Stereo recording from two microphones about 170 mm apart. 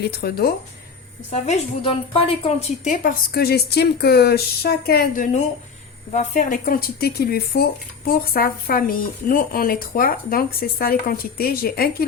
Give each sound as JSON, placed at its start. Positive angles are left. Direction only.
{"t": 0.0, "sound": "speech", "side_deg": 65}
{"t": 1.3, "sound": "a woman's voice", "side_deg": 40}